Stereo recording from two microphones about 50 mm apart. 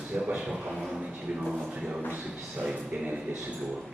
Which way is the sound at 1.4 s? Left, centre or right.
Centre.